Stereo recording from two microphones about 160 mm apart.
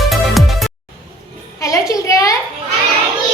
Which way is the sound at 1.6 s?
20° left (ahead or behind).